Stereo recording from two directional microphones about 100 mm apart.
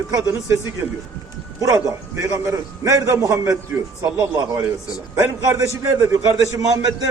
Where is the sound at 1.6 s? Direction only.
35° right (ahead or behind).